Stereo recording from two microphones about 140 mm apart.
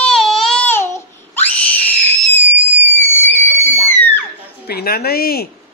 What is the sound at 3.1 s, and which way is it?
Screaming, 15° left (ahead or behind).